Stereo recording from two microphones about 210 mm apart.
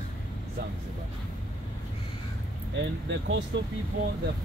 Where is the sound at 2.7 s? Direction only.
60° right (ahead or behind).